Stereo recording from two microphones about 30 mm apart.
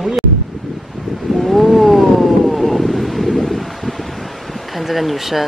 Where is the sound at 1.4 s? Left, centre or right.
Centre.